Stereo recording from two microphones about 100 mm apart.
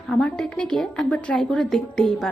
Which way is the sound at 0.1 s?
10° left (ahead or behind).